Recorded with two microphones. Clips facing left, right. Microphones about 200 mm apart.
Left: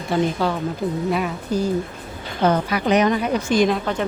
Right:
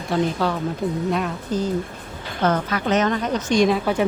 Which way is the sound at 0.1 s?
Centre (ahead or behind).